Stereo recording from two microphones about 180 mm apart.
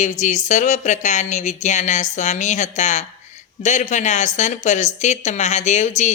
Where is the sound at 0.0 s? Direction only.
40° left (ahead or behind).